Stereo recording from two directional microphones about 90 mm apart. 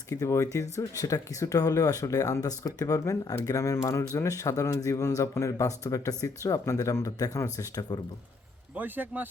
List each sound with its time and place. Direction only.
0.1 s speech: 35° left (ahead or behind)
8.7 s a man's voice: 20° right (ahead or behind)